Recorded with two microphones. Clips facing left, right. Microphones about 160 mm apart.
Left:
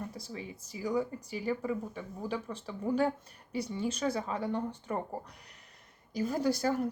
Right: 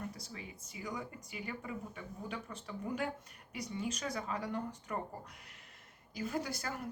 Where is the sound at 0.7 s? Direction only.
35° left (ahead or behind).